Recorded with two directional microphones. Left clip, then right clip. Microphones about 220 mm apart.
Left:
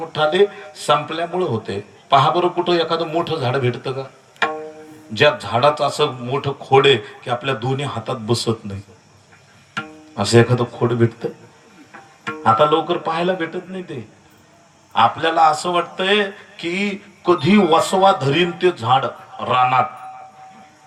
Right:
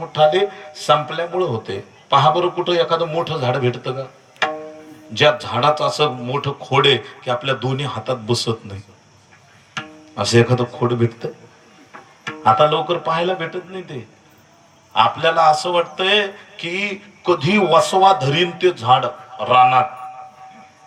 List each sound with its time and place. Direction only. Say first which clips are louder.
0.1 s a man's voice: right 2 dB; 5° right (ahead or behind)
5.1 s a man's voice: even; 5° right (ahead or behind)
9.7 s speech: even; 5° right (ahead or behind)
14.9 s a man's voice: even; 5° right (ahead or behind)